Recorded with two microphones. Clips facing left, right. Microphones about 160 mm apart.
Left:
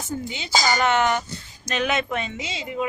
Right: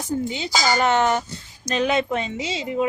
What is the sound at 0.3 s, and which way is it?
Speech, 35° right (ahead or behind).